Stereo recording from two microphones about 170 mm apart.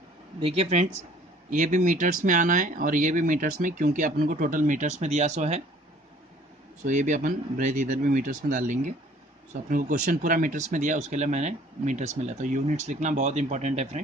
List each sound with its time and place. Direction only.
0.4 s speech: 35° right (ahead or behind)
6.8 s speech: 45° right (ahead or behind)